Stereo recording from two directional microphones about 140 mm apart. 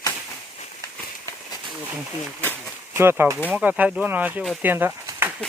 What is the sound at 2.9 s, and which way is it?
Speech, 15° right (ahead or behind).